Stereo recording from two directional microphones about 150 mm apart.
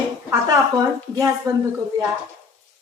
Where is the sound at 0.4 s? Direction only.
25° right (ahead or behind).